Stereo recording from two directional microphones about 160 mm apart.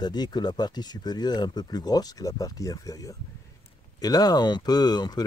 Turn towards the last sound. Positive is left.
turn(degrees=25)  # may be behind; listen again after turning